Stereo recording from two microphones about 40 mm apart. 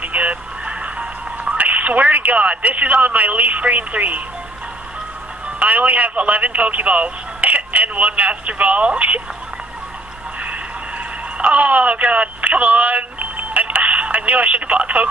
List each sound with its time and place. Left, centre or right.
0.0 s radio: right
5.6 s speech: right
11.3 s a sound: right